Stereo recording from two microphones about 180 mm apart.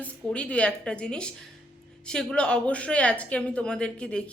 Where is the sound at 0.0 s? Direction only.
5° left (ahead or behind).